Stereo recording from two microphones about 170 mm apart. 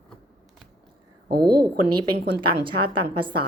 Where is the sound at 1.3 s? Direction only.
65° right (ahead or behind).